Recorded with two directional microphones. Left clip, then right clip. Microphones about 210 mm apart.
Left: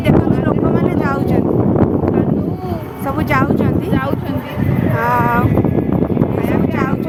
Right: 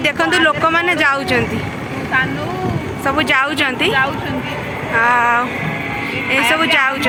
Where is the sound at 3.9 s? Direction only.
45° left (ahead or behind).